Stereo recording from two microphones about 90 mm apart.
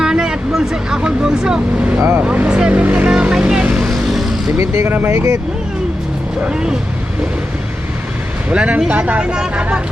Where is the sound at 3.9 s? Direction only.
Centre (ahead or behind).